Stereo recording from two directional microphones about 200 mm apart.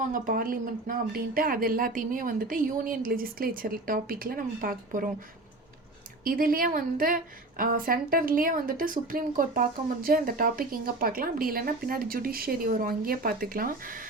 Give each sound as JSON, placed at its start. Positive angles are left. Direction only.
{"t": 0.1, "sound": "speech", "side_deg": -45}
{"t": 6.2, "sound": "speech", "side_deg": -45}